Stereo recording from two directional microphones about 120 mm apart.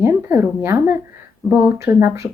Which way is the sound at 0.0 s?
20° right (ahead or behind).